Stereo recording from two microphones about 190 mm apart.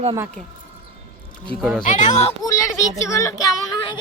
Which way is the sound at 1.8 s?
40° left (ahead or behind).